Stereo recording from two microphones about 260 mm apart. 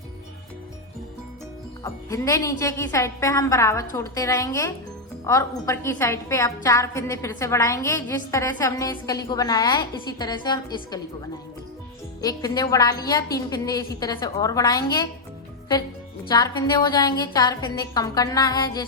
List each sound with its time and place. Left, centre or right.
1.8 s a woman's voice: centre
12.2 s a woman's voice: centre
16.3 s a woman's voice: centre